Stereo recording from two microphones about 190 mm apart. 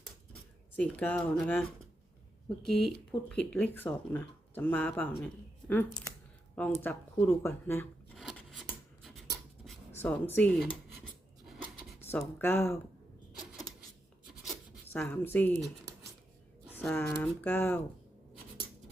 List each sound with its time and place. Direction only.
0.8 s speech: 5° left (ahead or behind)
2.6 s speech: centre (ahead or behind)
5.2 s a sound: 10° left (ahead or behind)
6.8 s speech: 10° left (ahead or behind)
8.1 s filing: centre (ahead or behind)
9.9 s speech: 10° left (ahead or behind)
11.4 s a sound: centre (ahead or behind)
11.9 s speech: 10° left (ahead or behind)
14.9 s speech: 10° left (ahead or behind)
16.7 s speech: 10° left (ahead or behind)